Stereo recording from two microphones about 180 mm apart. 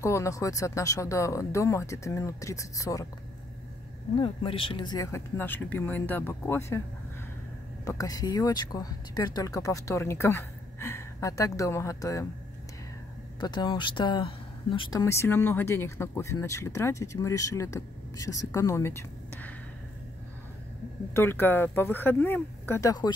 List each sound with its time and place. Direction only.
0.0 s speech: 15° left (ahead or behind)
4.2 s speech: 30° left (ahead or behind)
7.8 s speech: 20° left (ahead or behind)
13.4 s speech: 25° left (ahead or behind)
21.1 s speech: 10° left (ahead or behind)